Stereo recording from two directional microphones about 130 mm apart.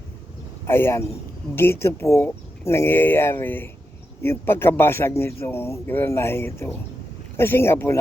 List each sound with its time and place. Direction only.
0.7 s a man's voice: 20° left (ahead or behind)